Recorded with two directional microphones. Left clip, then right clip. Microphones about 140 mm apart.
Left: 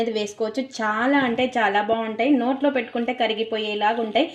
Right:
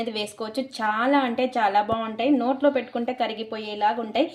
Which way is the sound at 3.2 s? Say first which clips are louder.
Left 5 dB; 40° left (ahead or behind).